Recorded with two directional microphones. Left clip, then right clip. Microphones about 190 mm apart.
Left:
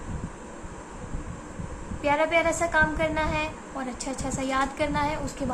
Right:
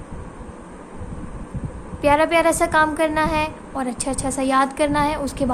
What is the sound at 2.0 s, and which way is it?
A woman's voice, 45° right (ahead or behind).